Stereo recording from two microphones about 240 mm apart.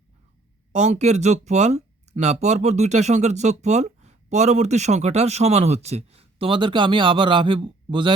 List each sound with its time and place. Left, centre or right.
0.7 s speech: right